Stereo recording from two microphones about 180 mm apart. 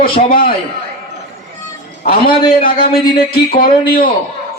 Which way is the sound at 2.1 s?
55° left (ahead or behind).